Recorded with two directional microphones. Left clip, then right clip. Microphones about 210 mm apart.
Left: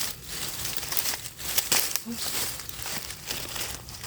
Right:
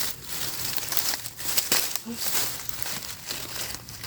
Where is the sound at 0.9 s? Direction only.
Centre (ahead or behind).